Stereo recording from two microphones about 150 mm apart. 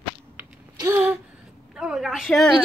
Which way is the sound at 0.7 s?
20° right (ahead or behind).